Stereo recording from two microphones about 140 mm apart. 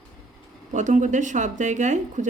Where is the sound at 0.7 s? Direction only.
60° right (ahead or behind).